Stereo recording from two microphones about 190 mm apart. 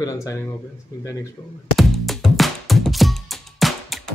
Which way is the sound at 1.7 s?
Centre (ahead or behind).